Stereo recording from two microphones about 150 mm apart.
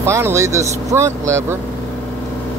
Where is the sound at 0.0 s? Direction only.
20° right (ahead or behind).